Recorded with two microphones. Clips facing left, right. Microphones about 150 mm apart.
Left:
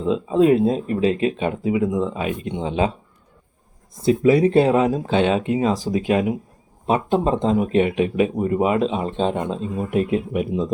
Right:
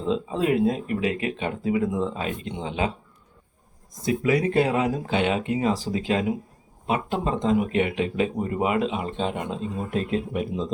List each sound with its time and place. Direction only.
0.3 s speech: 25° left (ahead or behind)
2.6 s speech: 25° left (ahead or behind)
4.0 s speech: 30° left (ahead or behind)
6.8 s speech: 30° left (ahead or behind)
9.7 s speech: 15° left (ahead or behind)